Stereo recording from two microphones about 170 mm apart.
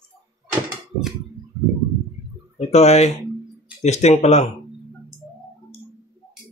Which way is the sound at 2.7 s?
40° left (ahead or behind).